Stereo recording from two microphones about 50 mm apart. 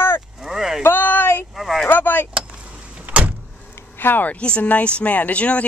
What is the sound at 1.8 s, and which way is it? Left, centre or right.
Speech, left.